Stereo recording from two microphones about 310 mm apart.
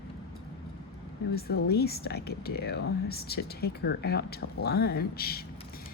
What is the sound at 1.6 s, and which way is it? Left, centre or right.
Speech, left.